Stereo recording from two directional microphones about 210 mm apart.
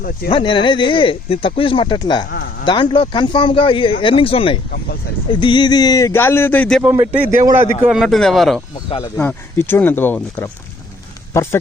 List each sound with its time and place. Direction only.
0.3 s a man's voice: 20° left (ahead or behind); by 8.6 s centre (ahead or behind)
8.7 s speech: 15° left (ahead or behind)